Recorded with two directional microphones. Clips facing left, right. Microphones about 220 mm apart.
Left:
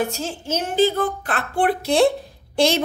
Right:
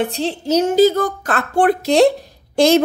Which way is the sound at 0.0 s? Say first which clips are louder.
Right 5 dB; 35° right (ahead or behind).